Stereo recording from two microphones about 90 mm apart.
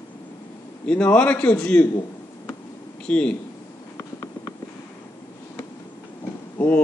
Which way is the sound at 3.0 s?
10° left (ahead or behind).